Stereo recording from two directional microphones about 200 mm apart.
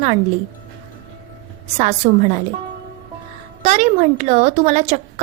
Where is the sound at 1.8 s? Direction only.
35° right (ahead or behind).